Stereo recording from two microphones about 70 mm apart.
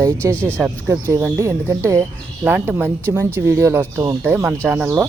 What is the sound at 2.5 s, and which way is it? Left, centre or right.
A man's voice, right.